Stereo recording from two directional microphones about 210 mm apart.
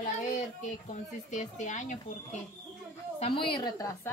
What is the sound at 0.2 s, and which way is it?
Child singing, 35° left (ahead or behind).